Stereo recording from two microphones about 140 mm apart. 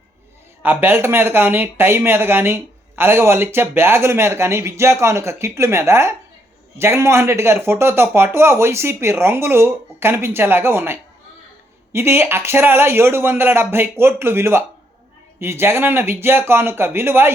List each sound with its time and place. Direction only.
0.6 s speech: 15° right (ahead or behind)